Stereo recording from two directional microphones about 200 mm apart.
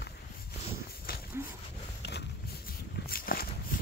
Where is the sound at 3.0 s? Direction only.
50° left (ahead or behind).